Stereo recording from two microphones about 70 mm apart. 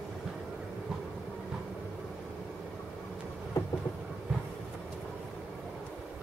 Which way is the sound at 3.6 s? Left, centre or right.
Left.